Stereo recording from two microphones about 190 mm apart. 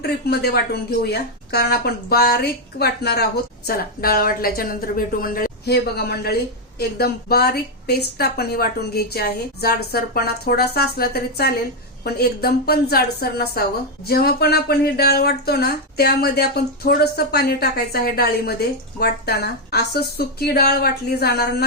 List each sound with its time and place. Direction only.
0.3 s a woman's voice: 55° left (ahead or behind)